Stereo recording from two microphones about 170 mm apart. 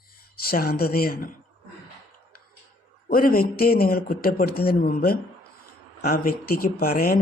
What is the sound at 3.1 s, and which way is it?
Speech, 60° left (ahead or behind).